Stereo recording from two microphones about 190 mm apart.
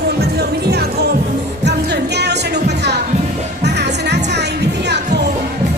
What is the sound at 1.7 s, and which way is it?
Music, 60° right (ahead or behind).